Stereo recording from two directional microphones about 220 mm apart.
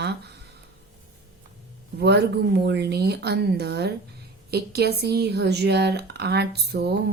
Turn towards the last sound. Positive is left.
turn(degrees=-50)  # may be behind; listen again after turning